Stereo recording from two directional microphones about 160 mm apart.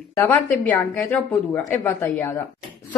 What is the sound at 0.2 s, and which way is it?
A woman's voice, 10° left (ahead or behind).